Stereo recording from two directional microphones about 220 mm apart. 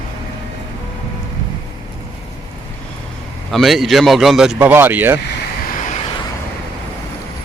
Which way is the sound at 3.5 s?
Centre (ahead or behind).